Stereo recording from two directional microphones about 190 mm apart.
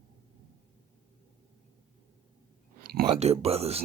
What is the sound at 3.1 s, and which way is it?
Speech, 35° right (ahead or behind).